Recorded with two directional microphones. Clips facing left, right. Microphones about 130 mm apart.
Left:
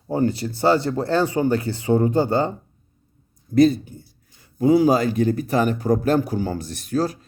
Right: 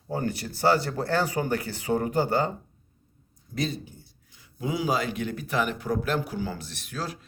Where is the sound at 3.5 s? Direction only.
50° left (ahead or behind).